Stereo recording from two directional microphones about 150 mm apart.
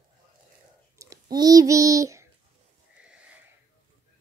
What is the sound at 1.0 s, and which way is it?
A child's voice, 25° right (ahead or behind).